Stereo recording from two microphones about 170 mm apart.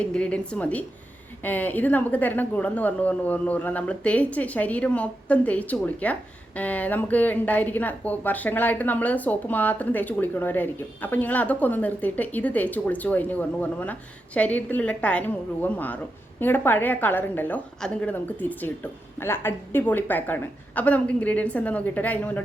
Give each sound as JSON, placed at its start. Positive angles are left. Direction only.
{"t": 0.0, "sound": "speech", "side_deg": 5}